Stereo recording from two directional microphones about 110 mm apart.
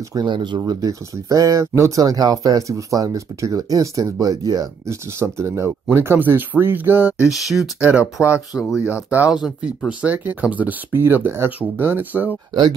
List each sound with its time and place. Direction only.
0.1 s speech: 45° right (ahead or behind)
0.6 s speech: 35° right (ahead or behind); by 7.2 s 20° right (ahead or behind)
7.2 s speech: centre (ahead or behind)